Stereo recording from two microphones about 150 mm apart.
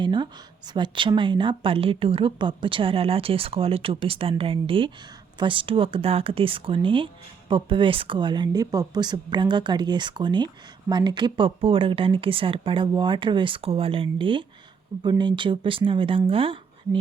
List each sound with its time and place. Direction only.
0.0 s speech: 30° right (ahead or behind)